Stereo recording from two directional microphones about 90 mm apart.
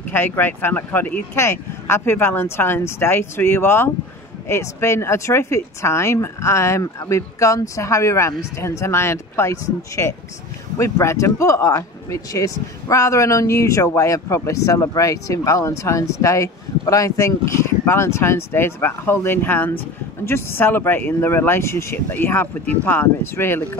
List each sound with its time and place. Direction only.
0.1 s speech: 20° left (ahead or behind)